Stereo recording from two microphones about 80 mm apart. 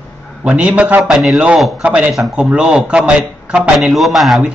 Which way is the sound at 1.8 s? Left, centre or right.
Centre.